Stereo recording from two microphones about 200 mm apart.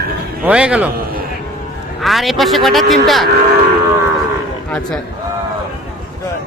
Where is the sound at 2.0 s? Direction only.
Centre (ahead or behind).